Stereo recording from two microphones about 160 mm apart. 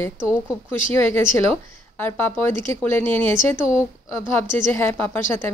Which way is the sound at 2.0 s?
10° left (ahead or behind).